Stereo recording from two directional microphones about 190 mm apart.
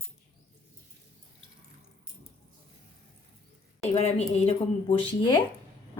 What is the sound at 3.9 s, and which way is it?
Speech, 35° left (ahead or behind).